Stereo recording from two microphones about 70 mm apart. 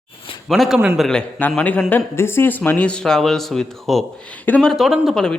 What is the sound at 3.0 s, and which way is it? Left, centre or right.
Speech, centre.